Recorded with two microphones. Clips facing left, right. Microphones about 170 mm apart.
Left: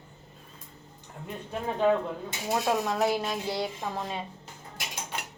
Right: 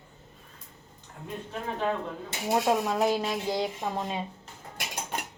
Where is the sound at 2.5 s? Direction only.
15° right (ahead or behind).